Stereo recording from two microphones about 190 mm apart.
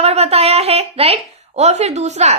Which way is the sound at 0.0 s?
35° right (ahead or behind).